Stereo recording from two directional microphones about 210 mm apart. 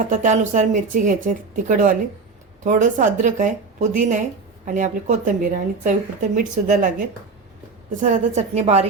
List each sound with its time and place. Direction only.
0.0 s speech: 40° right (ahead or behind)
8.0 s speech: 35° right (ahead or behind)